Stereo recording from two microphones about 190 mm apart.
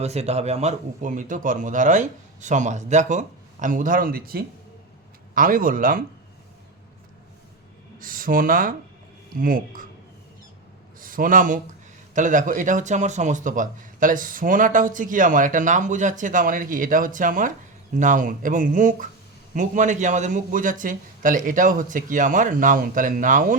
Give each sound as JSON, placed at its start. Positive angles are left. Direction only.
{"t": 0.0, "sound": "a man's voice", "side_deg": -35}
{"t": 7.9, "sound": "speech", "side_deg": -45}
{"t": 11.0, "sound": "a man's voice", "side_deg": -45}